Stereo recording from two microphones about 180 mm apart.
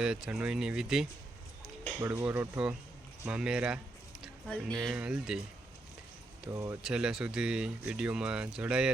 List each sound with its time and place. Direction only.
0.0 s speech: 5° right (ahead or behind)
4.2 s a sound: centre (ahead or behind)
4.8 s speech: 5° right (ahead or behind)
6.5 s speech: 20° right (ahead or behind)
6.8 s speech: 5° right (ahead or behind)